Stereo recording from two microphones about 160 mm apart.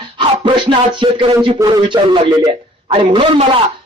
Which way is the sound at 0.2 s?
30° right (ahead or behind).